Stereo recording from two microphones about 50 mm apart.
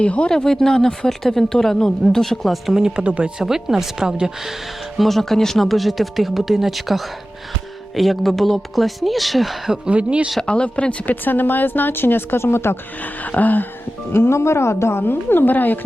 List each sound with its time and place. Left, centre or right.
0.0 s speech: left
0.3 s speech: centre
3.0 s speech: right
3.4 s speech: centre
4.9 s speech: centre
9.9 s speech: right
10.4 s speech: left
11.0 s speech: left
13.0 s music: left
14.1 s speech: left